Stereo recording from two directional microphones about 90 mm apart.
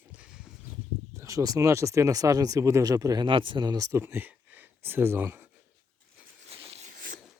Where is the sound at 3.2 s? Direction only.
65° right (ahead or behind); by 4.0 s 45° right (ahead or behind).